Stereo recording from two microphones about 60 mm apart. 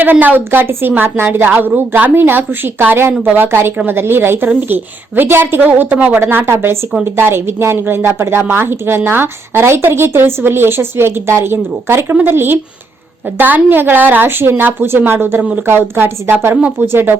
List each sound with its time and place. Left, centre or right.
0.0 s a woman's voice: right
15.4 s speech: right
15.6 s a woman's voice: right